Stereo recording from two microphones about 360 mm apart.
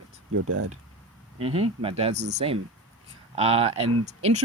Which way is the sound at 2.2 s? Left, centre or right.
Right.